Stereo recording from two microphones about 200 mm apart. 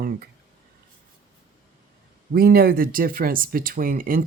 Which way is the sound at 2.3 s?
45° right (ahead or behind).